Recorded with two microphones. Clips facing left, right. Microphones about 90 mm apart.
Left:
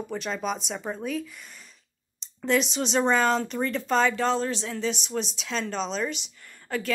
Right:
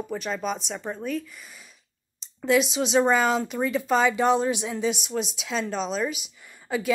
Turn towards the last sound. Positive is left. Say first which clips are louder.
# right 4 dB
turn(degrees=-10)  # may be behind; listen again after turning